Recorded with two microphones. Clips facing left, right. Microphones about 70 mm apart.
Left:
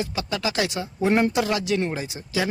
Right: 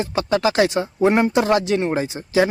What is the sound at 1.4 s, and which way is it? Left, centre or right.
Speech, right.